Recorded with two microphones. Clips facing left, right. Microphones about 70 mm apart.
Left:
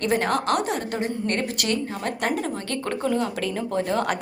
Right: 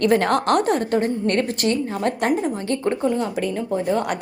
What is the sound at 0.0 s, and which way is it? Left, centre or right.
A woman's voice, right.